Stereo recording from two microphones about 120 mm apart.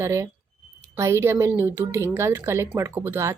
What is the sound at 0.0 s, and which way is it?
A woman's voice, 25° right (ahead or behind).